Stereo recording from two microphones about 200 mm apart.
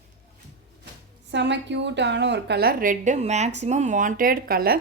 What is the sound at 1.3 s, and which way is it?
A woman's voice, 60° right (ahead or behind).